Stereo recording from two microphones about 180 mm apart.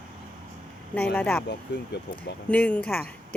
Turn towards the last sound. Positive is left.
turn(degrees=10)  # may be behind; listen again after turning